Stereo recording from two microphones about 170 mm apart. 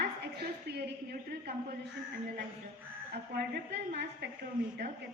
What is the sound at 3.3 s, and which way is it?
Speech, 70° right (ahead or behind).